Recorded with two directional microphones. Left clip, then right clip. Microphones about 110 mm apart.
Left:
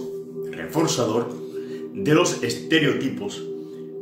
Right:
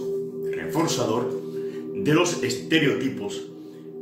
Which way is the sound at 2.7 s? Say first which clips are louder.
Left 2 dB; 5° left (ahead or behind).